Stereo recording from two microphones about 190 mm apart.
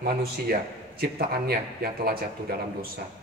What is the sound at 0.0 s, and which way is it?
A man's voice, 55° right (ahead or behind).